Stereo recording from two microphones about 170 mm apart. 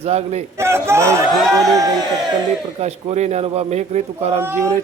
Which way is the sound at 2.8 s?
40° right (ahead or behind).